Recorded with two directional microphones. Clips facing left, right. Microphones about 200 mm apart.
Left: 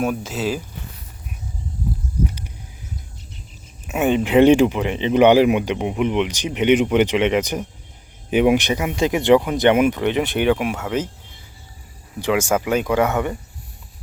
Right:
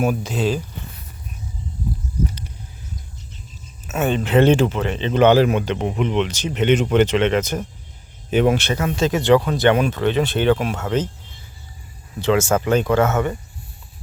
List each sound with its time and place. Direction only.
0.0 s speech: centre (ahead or behind)
3.8 s speech: 15° left (ahead or behind)
12.2 s speech: 10° left (ahead or behind)